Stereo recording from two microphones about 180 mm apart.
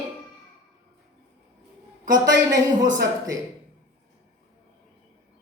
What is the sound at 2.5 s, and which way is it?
Speech, 20° right (ahead or behind).